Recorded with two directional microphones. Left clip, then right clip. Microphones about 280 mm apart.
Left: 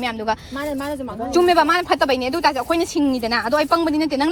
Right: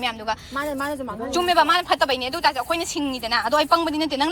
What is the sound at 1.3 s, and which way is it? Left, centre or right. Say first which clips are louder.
A woman's voice: left 3 dB; centre.